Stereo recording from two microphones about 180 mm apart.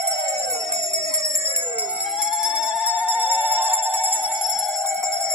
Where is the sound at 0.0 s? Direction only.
20° right (ahead or behind).